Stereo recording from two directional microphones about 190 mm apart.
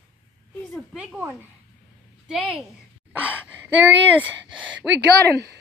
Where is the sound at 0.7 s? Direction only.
5° right (ahead or behind).